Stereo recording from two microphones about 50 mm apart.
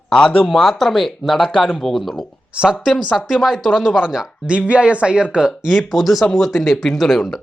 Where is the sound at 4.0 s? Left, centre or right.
Centre.